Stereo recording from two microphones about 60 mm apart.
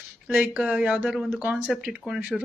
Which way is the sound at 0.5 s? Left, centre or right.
Right.